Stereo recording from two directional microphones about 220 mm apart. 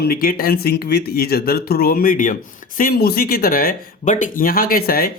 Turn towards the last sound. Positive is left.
turn(degrees=40)  # may be behind; listen again after turning